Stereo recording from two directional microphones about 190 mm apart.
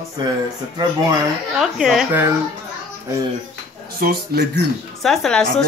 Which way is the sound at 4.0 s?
55° right (ahead or behind).